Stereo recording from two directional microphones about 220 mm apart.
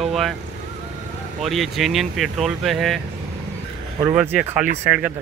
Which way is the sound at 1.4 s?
Centre (ahead or behind).